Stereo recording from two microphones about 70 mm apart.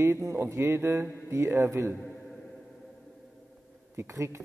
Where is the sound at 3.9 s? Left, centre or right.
Right.